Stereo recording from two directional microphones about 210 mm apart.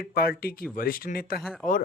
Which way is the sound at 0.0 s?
45° left (ahead or behind).